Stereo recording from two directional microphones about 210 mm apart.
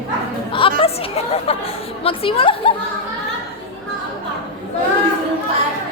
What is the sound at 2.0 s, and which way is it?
Speech, 25° left (ahead or behind).